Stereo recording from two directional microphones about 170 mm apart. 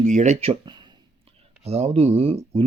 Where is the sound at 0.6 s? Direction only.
25° right (ahead or behind).